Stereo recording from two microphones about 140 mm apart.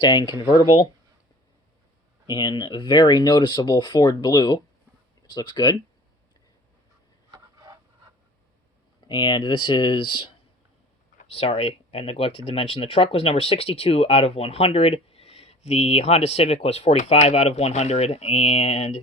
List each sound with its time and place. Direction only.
0.0 s speech: 30° left (ahead or behind)
2.2 s speech: 30° left (ahead or behind)
7.3 s a sound: 25° right (ahead or behind)
9.0 s speech: 35° left (ahead or behind)
11.3 s speech: 45° left (ahead or behind)